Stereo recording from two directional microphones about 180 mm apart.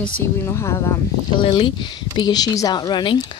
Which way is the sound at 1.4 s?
30° left (ahead or behind).